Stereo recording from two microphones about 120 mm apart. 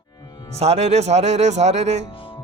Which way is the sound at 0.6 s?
60° right (ahead or behind).